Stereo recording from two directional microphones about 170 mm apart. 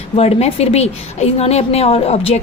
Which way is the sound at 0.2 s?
40° left (ahead or behind).